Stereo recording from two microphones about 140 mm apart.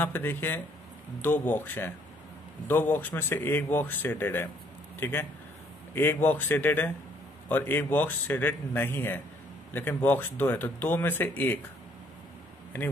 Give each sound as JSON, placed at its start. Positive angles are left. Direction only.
{"t": 0.0, "sound": "speech", "side_deg": 15}